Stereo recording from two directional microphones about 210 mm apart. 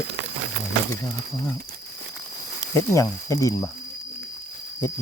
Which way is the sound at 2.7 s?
15° left (ahead or behind).